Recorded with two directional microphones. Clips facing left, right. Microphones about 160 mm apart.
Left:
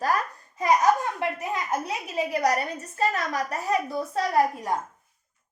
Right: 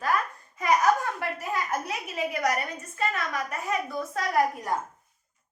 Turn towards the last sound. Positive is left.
turn(degrees=30)  # may be behind; listen again after turning